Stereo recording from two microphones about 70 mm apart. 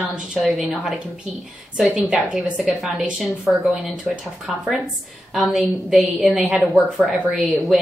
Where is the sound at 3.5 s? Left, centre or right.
Centre.